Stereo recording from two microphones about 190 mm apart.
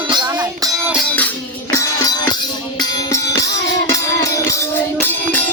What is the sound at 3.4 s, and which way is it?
Music, 15° left (ahead or behind).